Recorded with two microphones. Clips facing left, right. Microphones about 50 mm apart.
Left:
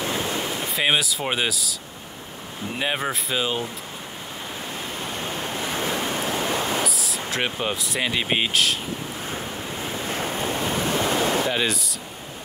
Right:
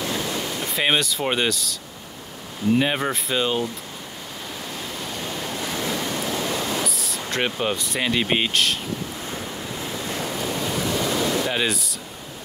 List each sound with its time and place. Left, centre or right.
0.0 s a sound: left
0.7 s speech: centre
2.8 s speech: centre
5.0 s waves: left
6.9 s a sound: centre
7.2 s speech: centre
9.3 s waves: left
11.5 s speech: centre